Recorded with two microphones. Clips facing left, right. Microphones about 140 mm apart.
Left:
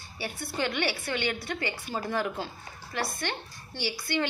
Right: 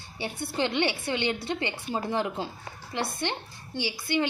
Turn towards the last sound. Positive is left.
turn(degrees=-15)  # may be behind; listen again after turning